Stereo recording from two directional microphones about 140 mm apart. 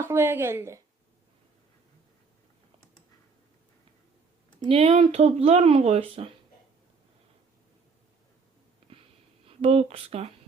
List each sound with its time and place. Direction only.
0.0 s a woman's voice: 15° right (ahead or behind)
4.7 s speech: 40° right (ahead or behind)
9.5 s speech: 45° right (ahead or behind)